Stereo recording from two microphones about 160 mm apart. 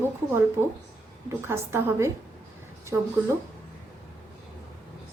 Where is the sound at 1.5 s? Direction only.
15° right (ahead or behind).